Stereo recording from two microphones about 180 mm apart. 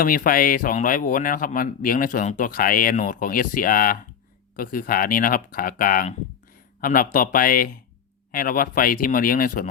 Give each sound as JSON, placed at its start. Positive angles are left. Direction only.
{"t": 0.0, "sound": "a man's voice", "side_deg": 50}